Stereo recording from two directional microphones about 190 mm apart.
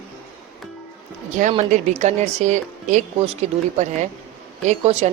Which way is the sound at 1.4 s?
40° right (ahead or behind).